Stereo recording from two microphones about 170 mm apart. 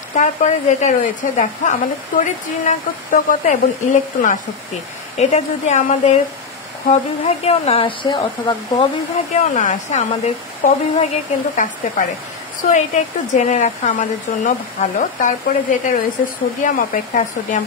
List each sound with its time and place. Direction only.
0.1 s speech: 50° left (ahead or behind); by 8.9 s 30° left (ahead or behind)
9.3 s speech: 45° left (ahead or behind)
16.6 s speech: 50° left (ahead or behind)